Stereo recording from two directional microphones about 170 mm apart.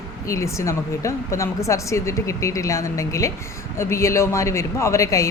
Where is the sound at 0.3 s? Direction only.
15° left (ahead or behind).